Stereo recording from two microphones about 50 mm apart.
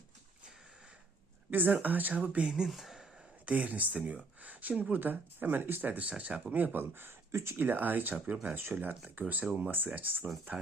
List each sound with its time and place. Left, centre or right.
1.5 s speech: right
2.6 s a sound: centre
3.4 s speech: right
6.5 s speech: right
6.8 s speech: right
7.3 s speech: right
7.5 s speech: right
9.2 s speech: right